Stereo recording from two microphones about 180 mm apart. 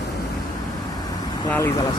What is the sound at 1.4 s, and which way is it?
Speech, 15° left (ahead or behind).